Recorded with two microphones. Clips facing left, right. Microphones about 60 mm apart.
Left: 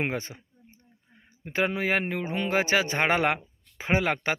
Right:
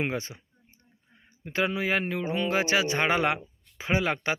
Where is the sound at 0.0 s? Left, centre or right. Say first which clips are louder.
Even; left.